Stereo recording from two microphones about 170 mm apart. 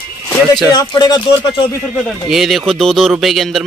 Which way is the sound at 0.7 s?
25° left (ahead or behind).